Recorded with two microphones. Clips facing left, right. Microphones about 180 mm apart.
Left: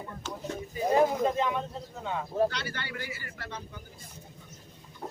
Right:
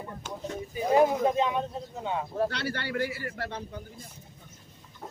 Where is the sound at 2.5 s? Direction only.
60° right (ahead or behind).